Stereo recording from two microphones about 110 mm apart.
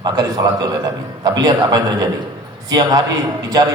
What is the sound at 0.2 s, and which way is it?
A man's voice, 40° right (ahead or behind).